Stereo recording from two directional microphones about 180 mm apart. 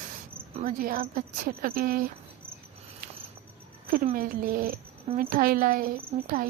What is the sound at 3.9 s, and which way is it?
A woman's voice, 55° right (ahead or behind).